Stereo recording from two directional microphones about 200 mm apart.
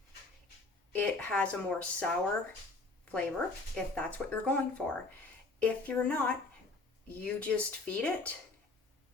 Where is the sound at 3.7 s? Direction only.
5° left (ahead or behind).